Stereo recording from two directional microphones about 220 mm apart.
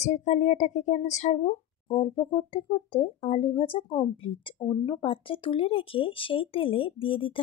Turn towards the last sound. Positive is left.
turn(degrees=25)  # may be behind; listen again after turning